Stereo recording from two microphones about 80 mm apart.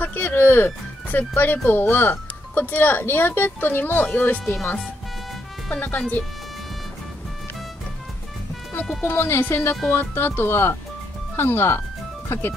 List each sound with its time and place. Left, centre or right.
0.0 s speech: left
5.7 s speech: left
9.0 s speech: left